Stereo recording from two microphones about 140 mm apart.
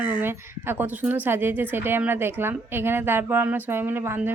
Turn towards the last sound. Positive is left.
turn(degrees=-15)  # may be behind; listen again after turning